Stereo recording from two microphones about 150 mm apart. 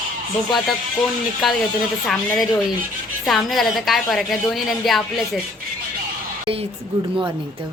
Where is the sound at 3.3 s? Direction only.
Centre (ahead or behind).